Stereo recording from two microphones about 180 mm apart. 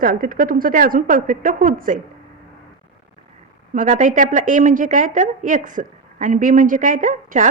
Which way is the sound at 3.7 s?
45° right (ahead or behind).